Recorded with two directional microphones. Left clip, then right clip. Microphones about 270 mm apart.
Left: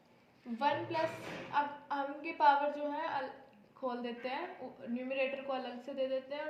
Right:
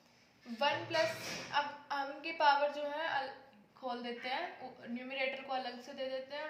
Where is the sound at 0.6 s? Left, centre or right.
Right.